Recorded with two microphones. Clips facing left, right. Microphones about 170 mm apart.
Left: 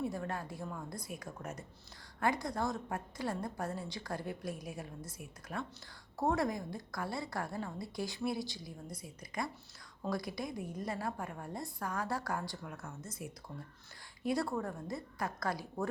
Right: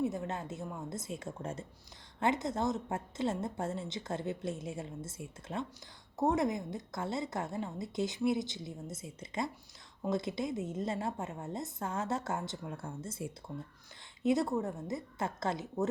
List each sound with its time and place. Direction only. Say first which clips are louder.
0.0 s a woman's voice: right 3 dB; 20° right (ahead or behind)